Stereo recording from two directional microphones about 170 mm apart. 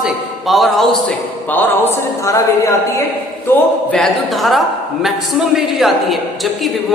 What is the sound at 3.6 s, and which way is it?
A man's voice, 5° left (ahead or behind).